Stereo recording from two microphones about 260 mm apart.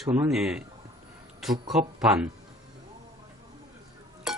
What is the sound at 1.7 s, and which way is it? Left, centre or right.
Speech, centre.